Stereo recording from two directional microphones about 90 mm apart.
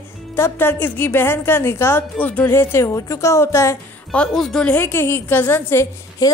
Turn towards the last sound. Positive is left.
turn(degrees=40)  # may be behind; listen again after turning